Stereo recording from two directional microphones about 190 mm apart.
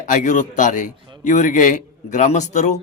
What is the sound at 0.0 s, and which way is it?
A man's voice, 40° left (ahead or behind).